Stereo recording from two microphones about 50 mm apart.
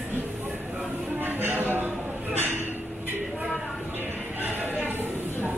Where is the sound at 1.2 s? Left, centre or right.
Right.